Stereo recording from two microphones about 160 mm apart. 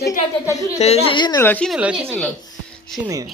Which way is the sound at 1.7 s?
5° right (ahead or behind).